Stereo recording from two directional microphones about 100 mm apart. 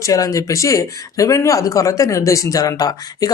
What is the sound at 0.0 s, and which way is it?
Speech, 35° left (ahead or behind).